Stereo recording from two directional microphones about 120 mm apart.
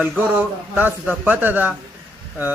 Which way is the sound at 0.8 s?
15° right (ahead or behind).